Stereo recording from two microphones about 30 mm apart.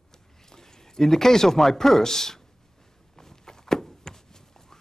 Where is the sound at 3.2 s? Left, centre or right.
Centre.